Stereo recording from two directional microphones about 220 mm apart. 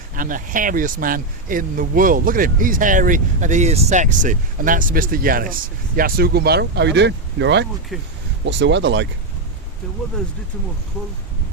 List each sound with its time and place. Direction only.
0.2 s speech: 40° right (ahead or behind); by 9.0 s 55° right (ahead or behind)